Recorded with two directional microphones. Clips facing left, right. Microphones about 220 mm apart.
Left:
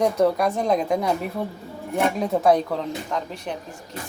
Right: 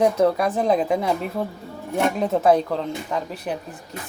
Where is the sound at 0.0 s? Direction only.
Centre (ahead or behind).